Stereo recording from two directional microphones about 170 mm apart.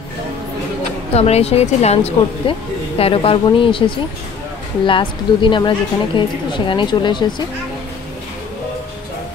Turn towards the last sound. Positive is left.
turn(degrees=25)  # may be behind; listen again after turning